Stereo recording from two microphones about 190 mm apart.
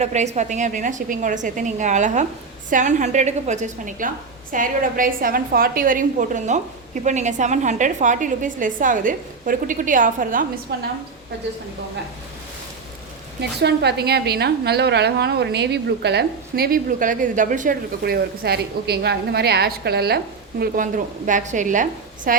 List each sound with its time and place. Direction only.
0.0 s a woman's voice: 35° right (ahead or behind)
10.7 s a woman's voice: 60° right (ahead or behind)
13.6 s a woman's voice: 60° right (ahead or behind); by 22.4 s 45° right (ahead or behind)